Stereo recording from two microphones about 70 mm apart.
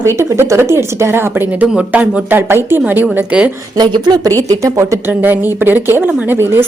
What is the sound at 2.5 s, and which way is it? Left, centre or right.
A woman's voice, right.